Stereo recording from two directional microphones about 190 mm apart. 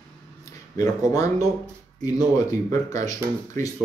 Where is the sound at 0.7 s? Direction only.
20° left (ahead or behind).